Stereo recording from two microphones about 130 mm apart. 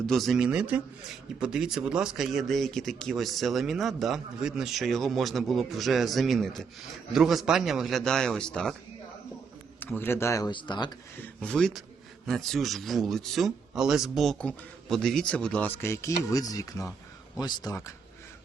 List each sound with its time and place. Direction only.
0.0 s a man's voice: centre (ahead or behind)
9.8 s speech: 15° left (ahead or behind)
10.5 s speech: 35° left (ahead or behind)
11.2 s a man's voice: 5° left (ahead or behind)
15.8 s speech: 20° left (ahead or behind)